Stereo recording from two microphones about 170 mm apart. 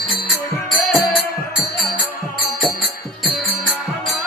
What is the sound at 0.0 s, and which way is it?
Music, centre (ahead or behind).